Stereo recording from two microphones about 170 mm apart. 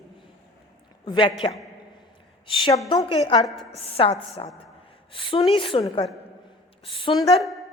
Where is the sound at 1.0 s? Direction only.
25° left (ahead or behind).